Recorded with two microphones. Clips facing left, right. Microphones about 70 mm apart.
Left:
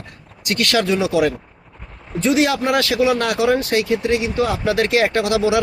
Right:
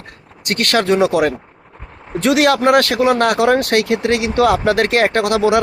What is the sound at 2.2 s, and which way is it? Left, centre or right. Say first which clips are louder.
Speech: right 4 dB; right.